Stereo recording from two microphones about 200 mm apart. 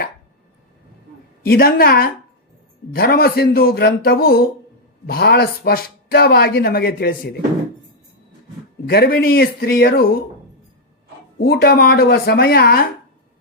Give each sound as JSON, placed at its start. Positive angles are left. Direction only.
{"t": 1.4, "sound": "speech", "side_deg": 50}
{"t": 8.9, "sound": "speech", "side_deg": 50}
{"t": 11.3, "sound": "speech", "side_deg": 55}